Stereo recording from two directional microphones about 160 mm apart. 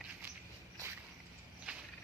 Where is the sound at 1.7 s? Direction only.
5° right (ahead or behind).